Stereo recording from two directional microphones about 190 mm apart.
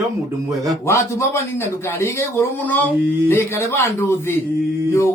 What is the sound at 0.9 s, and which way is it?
Speech, 15° left (ahead or behind).